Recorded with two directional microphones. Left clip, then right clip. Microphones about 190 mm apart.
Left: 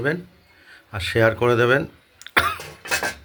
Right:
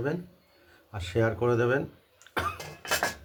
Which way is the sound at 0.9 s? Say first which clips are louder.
Left 9 dB; 15° left (ahead or behind).